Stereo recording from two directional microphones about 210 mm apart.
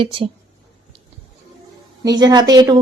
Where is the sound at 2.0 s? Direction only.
20° right (ahead or behind).